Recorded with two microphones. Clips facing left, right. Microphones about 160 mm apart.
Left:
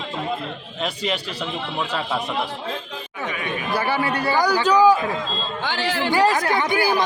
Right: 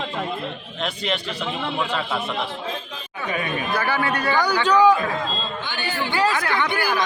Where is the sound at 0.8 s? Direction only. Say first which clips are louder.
Left 1 dB; 5° left (ahead or behind).